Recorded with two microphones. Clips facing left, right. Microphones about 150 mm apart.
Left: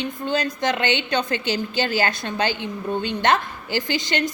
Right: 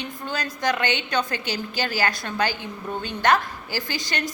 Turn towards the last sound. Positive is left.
turn(degrees=20)  # may be behind; listen again after turning